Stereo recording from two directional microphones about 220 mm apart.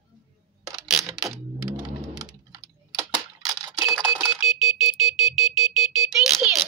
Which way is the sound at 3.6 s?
15° right (ahead or behind).